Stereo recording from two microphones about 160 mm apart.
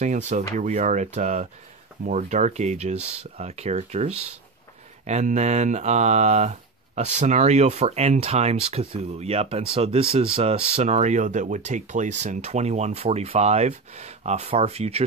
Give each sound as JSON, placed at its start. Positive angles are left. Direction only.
{"t": 0.0, "sound": "speech", "side_deg": -50}
{"t": 10.8, "sound": "speech", "side_deg": -45}